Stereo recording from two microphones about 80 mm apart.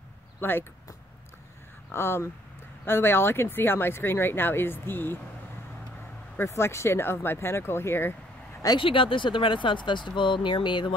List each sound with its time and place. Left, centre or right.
0.4 s speech: left
1.9 s speech: left
6.3 s speech: left
8.7 s speech: left